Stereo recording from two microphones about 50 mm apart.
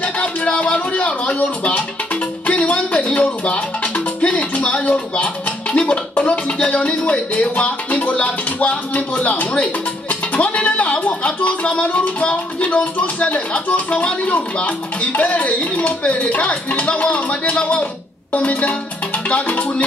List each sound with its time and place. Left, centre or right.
0.0 s speech: left
2.4 s music: left
8.1 s speech: left
19.2 s music: left